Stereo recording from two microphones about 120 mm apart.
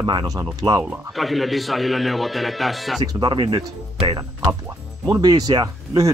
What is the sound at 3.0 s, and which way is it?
Speech, 35° right (ahead or behind).